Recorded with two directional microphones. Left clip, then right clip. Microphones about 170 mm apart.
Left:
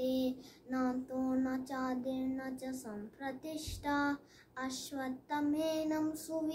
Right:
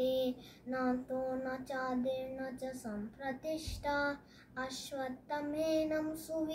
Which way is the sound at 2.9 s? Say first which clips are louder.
Right 2 dB; 10° left (ahead or behind).